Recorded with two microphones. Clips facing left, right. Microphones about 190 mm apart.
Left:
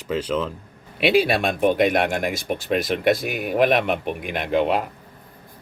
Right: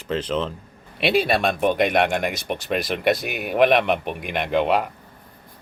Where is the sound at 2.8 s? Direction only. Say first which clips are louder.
Left 1 dB; 50° left (ahead or behind).